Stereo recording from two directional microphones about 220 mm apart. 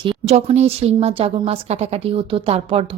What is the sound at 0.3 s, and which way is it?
Speech, 30° right (ahead or behind).